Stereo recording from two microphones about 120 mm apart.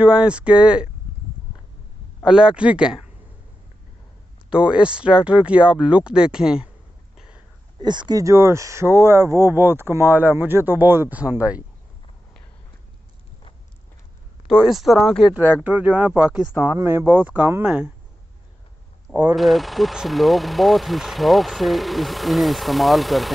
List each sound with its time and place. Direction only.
0.0 s speech: 10° right (ahead or behind)
2.2 s speech: 5° right (ahead or behind)
4.5 s speech: 10° right (ahead or behind)
7.2 s a sound: 10° right (ahead or behind)
7.8 s speech: 40° right (ahead or behind); by 11.6 s 10° right (ahead or behind)
14.5 s speech: centre (ahead or behind)
15.3 s speech: 15° right (ahead or behind)
19.3 s speech: centre (ahead or behind)